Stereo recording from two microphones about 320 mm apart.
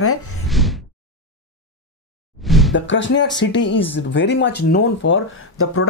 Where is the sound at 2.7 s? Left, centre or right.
Left.